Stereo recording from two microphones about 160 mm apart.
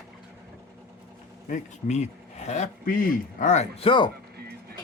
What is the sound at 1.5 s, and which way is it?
Speech, 45° left (ahead or behind).